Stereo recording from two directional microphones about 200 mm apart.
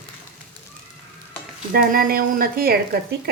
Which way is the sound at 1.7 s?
45° right (ahead or behind).